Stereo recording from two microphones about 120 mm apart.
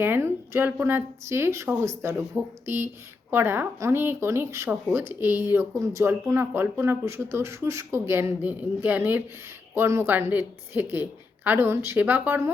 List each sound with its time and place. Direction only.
0.0 s a woman's voice: 20° right (ahead or behind)